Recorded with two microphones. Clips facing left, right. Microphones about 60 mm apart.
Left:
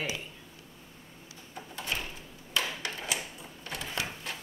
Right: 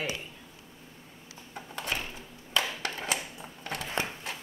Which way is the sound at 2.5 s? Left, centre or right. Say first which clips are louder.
Right 2 dB; right.